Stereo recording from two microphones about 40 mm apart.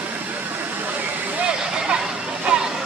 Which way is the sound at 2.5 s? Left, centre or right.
Right.